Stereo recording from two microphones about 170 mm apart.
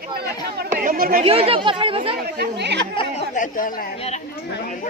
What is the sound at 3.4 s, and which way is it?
Speech, 50° left (ahead or behind).